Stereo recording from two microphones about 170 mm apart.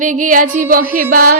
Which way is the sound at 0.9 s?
55° right (ahead or behind).